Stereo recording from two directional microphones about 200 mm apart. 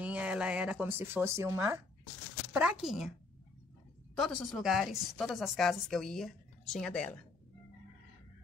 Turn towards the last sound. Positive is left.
turn(degrees=5)  # may be behind; listen again after turning